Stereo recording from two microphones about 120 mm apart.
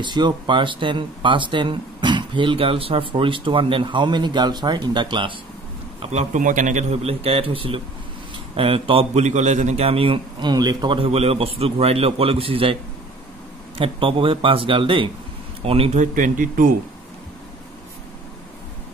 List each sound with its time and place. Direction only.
0.0 s speech: 40° right (ahead or behind)
5.9 s a man's voice: 65° right (ahead or behind); by 9.2 s 50° right (ahead or behind)
9.2 s a man's voice: 80° right
9.8 s speech: 50° right (ahead or behind)
11.1 s speech: 55° right (ahead or behind)
13.7 s speech: 45° right (ahead or behind)
16.0 s speech: 90° right